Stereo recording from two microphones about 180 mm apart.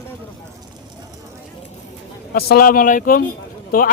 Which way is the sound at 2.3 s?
55° left (ahead or behind).